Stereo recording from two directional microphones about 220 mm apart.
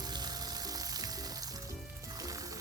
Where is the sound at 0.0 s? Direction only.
20° right (ahead or behind).